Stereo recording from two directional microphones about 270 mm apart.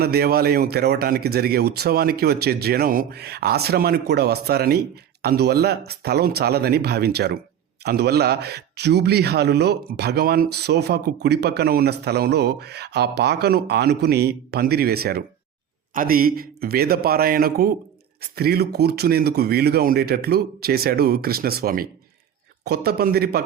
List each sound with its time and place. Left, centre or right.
0.0 s speech: right